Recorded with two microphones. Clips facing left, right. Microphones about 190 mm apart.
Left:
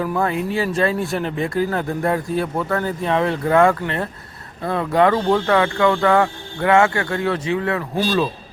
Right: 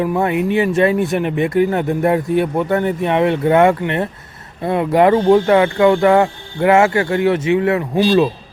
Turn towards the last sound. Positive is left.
turn(degrees=-25)  # may be behind; listen again after turning